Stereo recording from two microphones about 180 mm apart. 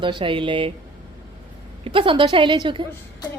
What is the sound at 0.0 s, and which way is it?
Speech, 30° right (ahead or behind).